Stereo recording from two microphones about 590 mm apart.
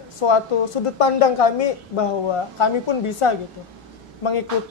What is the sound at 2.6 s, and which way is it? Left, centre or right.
Speech, left.